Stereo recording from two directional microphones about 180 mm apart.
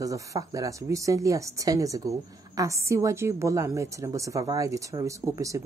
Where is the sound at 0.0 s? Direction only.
20° right (ahead or behind).